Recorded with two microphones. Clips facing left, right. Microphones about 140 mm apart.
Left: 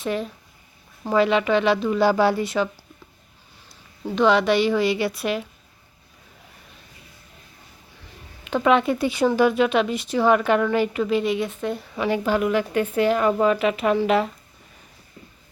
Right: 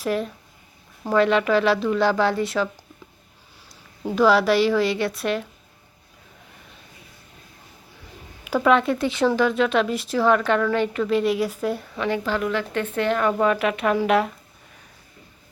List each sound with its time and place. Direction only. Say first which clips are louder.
0.0 s speech: right 2 dB; centre (ahead or behind)
4.0 s speech: right 1 dB; 5° right (ahead or behind)
8.4 s speech: even; centre (ahead or behind)
11.9 s speech: left 6 dB; 15° left (ahead or behind)